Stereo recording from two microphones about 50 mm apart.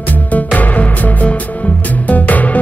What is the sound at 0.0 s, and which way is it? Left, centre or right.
Music, left.